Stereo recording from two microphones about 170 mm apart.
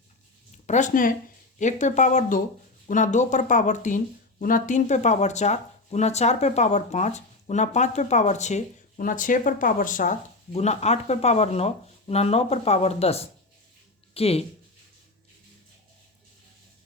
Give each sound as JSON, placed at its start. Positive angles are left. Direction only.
{"t": 0.7, "sound": "speech", "side_deg": 50}